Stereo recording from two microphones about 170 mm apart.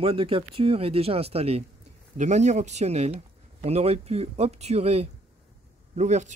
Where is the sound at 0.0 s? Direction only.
35° right (ahead or behind).